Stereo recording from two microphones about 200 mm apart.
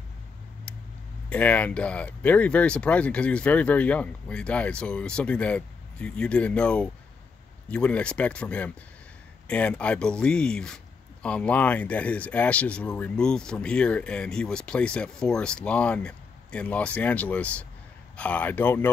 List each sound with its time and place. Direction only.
1.3 s speech: 5° left (ahead or behind)